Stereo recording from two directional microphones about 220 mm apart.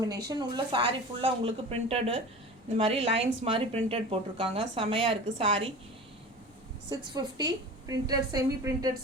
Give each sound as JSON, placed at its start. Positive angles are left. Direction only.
{"t": 0.3, "sound": "speech", "side_deg": -20}
{"t": 6.9, "sound": "a woman's voice", "side_deg": -20}